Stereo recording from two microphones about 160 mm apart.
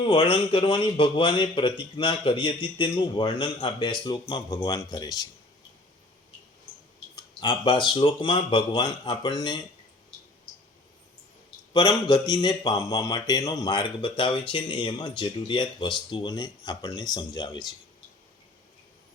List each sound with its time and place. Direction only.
0.0 s speech: 35° left (ahead or behind)
7.2 s speech: 25° left (ahead or behind)
11.7 s speech: 25° left (ahead or behind)